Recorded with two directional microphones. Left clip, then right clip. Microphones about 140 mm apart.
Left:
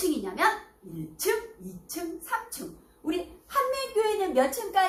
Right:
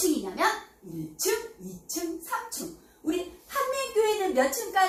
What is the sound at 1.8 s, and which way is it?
Speech, 45° right (ahead or behind).